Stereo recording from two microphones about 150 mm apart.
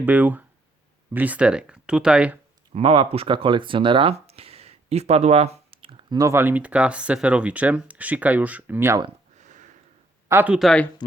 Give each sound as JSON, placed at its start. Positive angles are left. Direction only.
{"t": 0.0, "sound": "speech", "side_deg": -10}
{"t": 2.7, "sound": "speech", "side_deg": -35}
{"t": 9.4, "sound": "sniff", "side_deg": -55}
{"t": 10.2, "sound": "speech", "side_deg": -15}
{"t": 10.5, "sound": "speech", "side_deg": 0}